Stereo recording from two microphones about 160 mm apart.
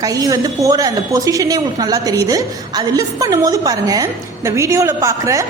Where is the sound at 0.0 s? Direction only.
20° right (ahead or behind).